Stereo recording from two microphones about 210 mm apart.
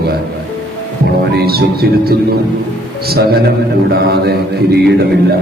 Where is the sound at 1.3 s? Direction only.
50° right (ahead or behind).